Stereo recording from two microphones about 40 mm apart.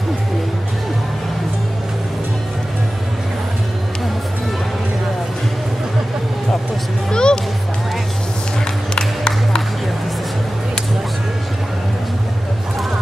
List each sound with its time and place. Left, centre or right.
7.1 s music: left
8.9 s music: centre